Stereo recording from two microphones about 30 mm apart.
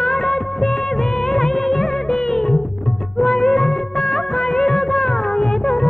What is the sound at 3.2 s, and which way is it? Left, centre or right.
Music of bollywood, centre.